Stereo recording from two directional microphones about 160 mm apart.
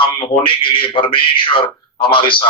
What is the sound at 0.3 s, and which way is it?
Speech, 35° left (ahead or behind).